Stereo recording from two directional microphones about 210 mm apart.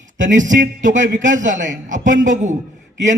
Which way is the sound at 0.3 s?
35° right (ahead or behind).